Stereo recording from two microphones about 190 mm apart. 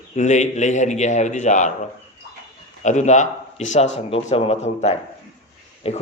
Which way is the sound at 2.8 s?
40° left (ahead or behind).